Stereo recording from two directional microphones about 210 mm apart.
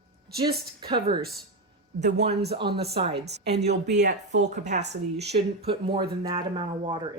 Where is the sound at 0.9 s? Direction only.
20° right (ahead or behind).